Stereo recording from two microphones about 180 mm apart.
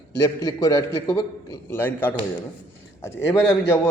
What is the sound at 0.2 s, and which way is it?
A man's voice, 20° left (ahead or behind).